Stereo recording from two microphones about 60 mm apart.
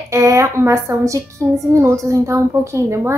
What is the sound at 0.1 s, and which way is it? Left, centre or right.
A woman's voice, right.